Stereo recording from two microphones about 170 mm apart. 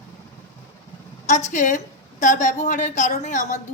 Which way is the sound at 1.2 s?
45° left (ahead or behind).